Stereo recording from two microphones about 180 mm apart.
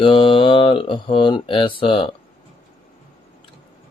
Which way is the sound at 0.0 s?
30° left (ahead or behind).